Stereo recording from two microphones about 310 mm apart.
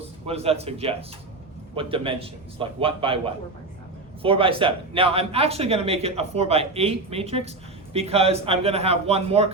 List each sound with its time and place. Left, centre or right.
0.3 s a man's voice: centre